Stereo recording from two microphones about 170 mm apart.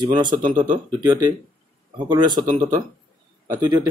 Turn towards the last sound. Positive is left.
turn(degrees=-25)  # may be behind; listen again after turning